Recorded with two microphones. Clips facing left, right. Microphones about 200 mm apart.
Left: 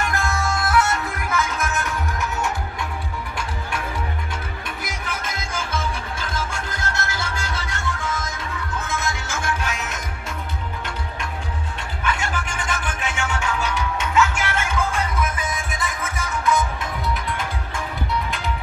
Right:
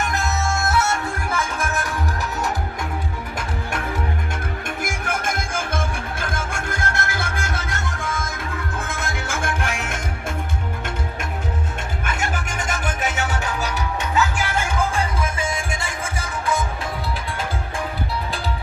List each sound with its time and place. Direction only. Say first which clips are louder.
0.0 s music: even; 20° right (ahead or behind)
4.6 s music: right 5 dB; 50° right (ahead or behind)
12.0 s music: left 2 dB; 45° right (ahead or behind); by 16.6 s 30° right (ahead or behind)